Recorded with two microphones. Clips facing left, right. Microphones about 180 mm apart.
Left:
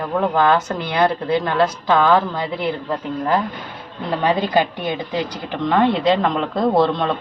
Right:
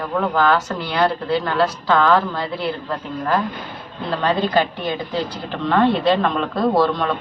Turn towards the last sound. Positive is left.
turn(degrees=20)  # may be behind; listen again after turning